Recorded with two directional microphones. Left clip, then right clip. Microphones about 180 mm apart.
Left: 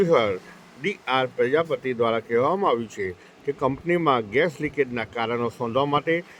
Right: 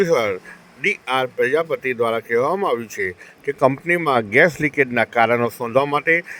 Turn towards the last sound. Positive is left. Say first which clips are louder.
# right 5 dB
turn(degrees=-25)  # may be behind; listen again after turning